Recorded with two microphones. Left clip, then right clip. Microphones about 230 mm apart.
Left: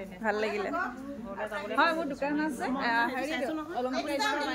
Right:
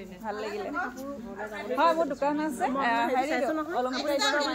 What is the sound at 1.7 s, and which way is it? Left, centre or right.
A woman's voice, centre.